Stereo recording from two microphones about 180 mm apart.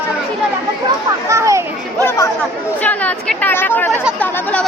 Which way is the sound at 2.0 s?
15° left (ahead or behind).